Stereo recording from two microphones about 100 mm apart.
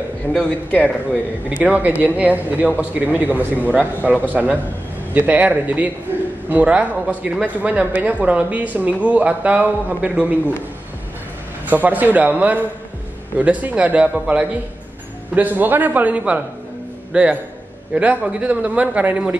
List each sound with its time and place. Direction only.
0.3 s speech: 10° left (ahead or behind)
1.5 s speech: 15° right (ahead or behind)
11.7 s speech: 15° right (ahead or behind)